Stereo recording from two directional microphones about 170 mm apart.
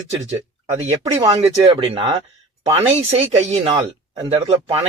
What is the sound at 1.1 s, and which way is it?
Speech, 35° right (ahead or behind).